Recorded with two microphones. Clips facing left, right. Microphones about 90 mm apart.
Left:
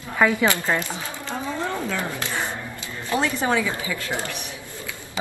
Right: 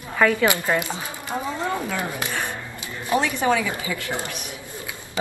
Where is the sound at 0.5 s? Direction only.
15° right (ahead or behind).